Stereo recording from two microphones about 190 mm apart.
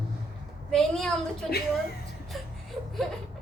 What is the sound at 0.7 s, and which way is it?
Speech, centre (ahead or behind).